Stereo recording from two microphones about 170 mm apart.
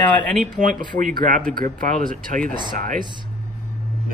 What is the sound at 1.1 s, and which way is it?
A man's voice, 50° right (ahead or behind).